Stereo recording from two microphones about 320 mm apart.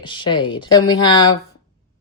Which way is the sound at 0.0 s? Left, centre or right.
Centre.